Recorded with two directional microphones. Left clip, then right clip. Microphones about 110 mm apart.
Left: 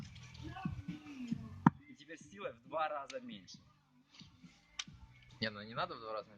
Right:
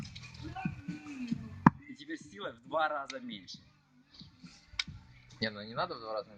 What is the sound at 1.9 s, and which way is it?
Speech, 35° left (ahead or behind).